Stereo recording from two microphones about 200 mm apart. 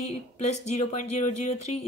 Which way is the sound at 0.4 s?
35° left (ahead or behind).